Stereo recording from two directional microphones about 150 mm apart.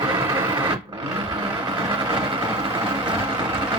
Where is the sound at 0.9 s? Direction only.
15° right (ahead or behind).